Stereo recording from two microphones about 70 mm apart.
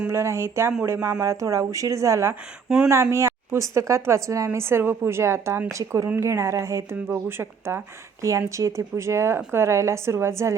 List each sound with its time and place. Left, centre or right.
0.1 s a woman's voice: right
2.6 s speech: centre
2.9 s a woman's voice: right
8.2 s a woman's voice: right